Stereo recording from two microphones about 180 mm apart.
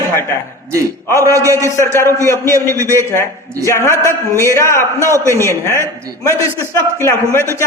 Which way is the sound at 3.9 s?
15° right (ahead or behind).